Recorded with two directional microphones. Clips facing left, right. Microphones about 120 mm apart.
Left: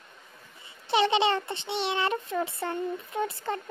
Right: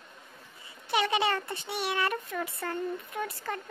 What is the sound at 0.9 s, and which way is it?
Child singing, 25° left (ahead or behind).